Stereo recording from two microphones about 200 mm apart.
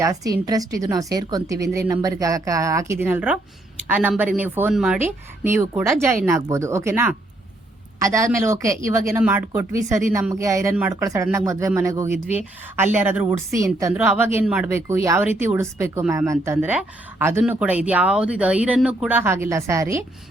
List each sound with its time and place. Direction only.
0.0 s speech: 15° right (ahead or behind)